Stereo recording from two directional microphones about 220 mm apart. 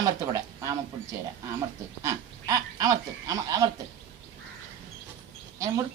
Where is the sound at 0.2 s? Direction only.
15° right (ahead or behind).